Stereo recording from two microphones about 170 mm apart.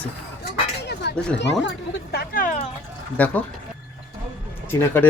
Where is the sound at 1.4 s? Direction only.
90° left; by 2.6 s 50° left (ahead or behind).